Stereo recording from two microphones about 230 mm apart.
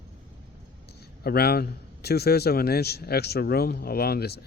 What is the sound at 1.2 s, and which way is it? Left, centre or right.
A man's voice, left.